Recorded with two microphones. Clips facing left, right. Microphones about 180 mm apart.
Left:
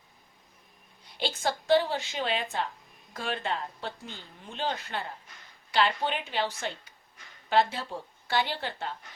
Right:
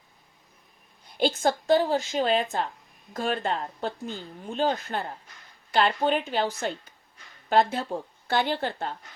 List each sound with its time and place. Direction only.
1.2 s speech: 50° right (ahead or behind)